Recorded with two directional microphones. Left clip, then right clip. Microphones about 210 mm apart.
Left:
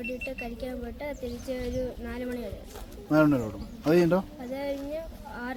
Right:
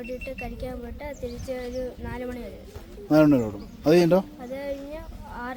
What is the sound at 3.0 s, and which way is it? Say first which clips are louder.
A man's voice: right 4 dB; 40° right (ahead or behind).